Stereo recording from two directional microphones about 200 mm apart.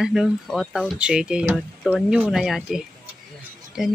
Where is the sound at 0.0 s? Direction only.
Centre (ahead or behind).